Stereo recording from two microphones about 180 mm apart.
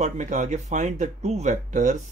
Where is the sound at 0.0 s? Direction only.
45° right (ahead or behind).